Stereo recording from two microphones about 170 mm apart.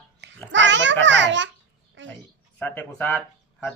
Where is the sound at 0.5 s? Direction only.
90° right.